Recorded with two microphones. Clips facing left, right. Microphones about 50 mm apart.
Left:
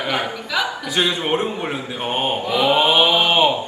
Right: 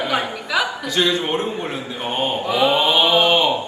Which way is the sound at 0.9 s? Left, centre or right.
Left.